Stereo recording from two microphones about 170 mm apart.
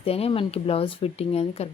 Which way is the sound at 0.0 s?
35° left (ahead or behind).